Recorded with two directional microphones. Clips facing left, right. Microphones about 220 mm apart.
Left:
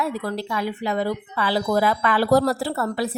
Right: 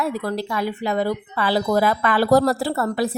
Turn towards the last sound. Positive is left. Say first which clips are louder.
# right 2 dB
turn(degrees=-45)  # may be behind; listen again after turning